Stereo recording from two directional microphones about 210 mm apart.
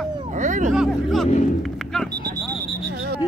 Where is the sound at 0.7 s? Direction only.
Centre (ahead or behind).